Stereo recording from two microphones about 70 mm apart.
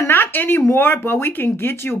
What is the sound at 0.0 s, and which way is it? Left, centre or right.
Speech, left.